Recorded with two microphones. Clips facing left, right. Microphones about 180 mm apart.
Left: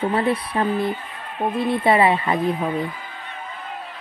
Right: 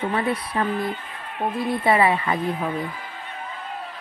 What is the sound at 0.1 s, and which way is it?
Speech, 30° left (ahead or behind).